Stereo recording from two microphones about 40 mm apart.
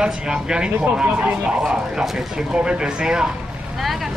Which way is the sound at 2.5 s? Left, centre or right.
Right.